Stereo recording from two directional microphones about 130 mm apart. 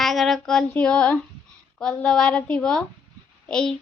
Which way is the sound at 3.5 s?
5° left (ahead or behind).